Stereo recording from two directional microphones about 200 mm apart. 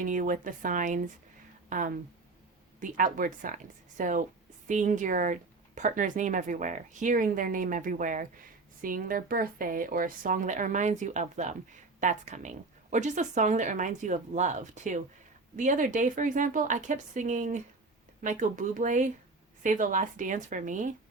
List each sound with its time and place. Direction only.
0.0 s speech: 40° right (ahead or behind)
2.8 s a woman's voice: 40° right (ahead or behind)